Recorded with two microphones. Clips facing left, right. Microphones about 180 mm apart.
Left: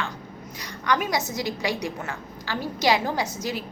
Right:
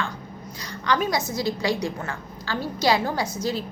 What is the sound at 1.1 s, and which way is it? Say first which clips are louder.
A woman's voice: right 2 dB; 15° left (ahead or behind).